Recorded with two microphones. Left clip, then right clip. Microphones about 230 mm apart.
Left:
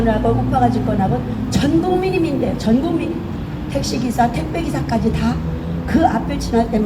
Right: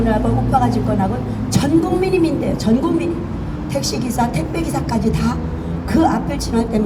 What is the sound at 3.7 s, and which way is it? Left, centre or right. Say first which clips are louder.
A woman's voice: left 1 dB; right.